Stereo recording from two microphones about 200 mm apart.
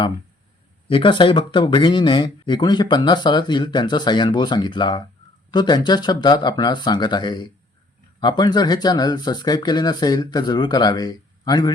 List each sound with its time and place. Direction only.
0.9 s speech: 25° left (ahead or behind)